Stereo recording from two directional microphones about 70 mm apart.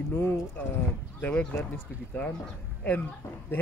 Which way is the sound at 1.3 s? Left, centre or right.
Centre.